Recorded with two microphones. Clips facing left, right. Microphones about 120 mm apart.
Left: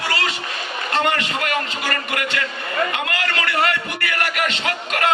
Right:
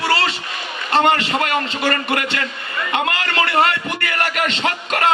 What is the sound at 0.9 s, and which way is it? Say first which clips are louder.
A man's voice: right 5 dB; 25° right (ahead or behind).